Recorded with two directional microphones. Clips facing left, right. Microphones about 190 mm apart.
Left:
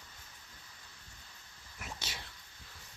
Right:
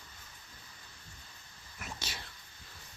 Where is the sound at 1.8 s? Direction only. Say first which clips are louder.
Right 1 dB; 20° left (ahead or behind).